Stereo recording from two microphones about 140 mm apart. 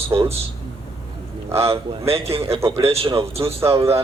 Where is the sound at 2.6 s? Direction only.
20° right (ahead or behind).